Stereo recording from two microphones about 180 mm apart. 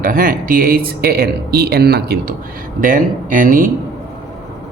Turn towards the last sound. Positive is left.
turn(degrees=-50)  # may be behind; listen again after turning